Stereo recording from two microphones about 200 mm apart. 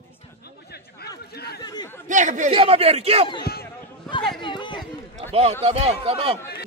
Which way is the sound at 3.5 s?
50° left (ahead or behind).